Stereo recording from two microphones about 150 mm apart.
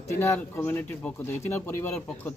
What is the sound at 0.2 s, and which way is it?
Speech, 15° left (ahead or behind).